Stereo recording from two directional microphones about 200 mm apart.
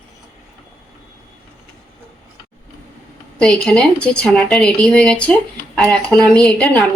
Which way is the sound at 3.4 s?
5° left (ahead or behind).